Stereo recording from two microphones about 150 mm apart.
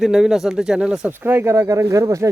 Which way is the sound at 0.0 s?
5° right (ahead or behind).